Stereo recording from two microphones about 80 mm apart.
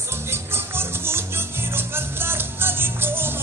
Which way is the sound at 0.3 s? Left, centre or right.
Right.